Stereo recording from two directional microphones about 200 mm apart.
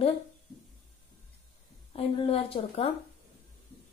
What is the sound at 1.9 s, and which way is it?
A woman's voice, 30° left (ahead or behind).